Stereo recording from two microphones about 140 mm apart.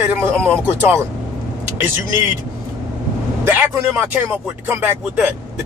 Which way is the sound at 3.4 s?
15° right (ahead or behind).